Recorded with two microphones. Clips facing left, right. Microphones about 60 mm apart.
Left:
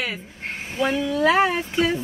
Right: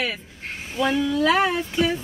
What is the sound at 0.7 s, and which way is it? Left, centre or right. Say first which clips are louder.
Speech: right 1 dB; centre.